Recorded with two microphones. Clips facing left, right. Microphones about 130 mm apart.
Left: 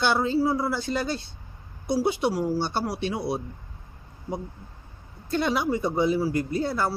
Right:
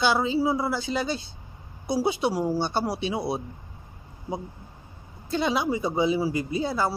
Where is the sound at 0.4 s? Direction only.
5° right (ahead or behind).